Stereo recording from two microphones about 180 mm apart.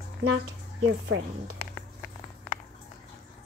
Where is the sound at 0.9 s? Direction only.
90° right.